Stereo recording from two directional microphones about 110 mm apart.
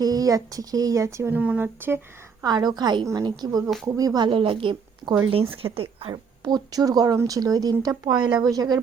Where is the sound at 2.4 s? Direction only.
35° right (ahead or behind); by 6.1 s 55° right (ahead or behind).